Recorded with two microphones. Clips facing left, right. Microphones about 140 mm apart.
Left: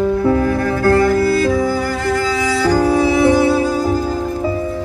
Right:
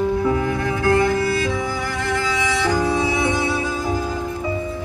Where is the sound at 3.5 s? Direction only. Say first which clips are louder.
Left 8 dB; 35° left (ahead or behind).